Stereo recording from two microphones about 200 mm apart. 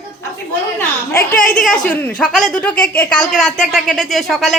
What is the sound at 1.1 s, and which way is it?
Speech, 45° left (ahead or behind).